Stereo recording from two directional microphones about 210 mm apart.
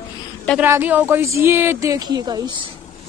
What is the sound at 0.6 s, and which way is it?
A woman's voice, 10° right (ahead or behind).